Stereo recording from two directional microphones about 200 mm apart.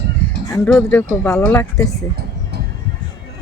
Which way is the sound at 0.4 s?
15° left (ahead or behind).